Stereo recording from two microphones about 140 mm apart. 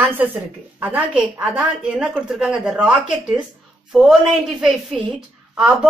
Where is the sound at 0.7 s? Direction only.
10° right (ahead or behind).